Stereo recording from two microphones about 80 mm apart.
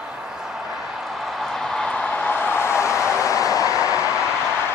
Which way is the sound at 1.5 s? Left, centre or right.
Centre.